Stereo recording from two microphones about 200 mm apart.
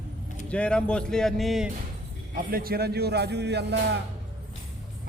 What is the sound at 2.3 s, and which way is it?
A man's voice, 45° right (ahead or behind).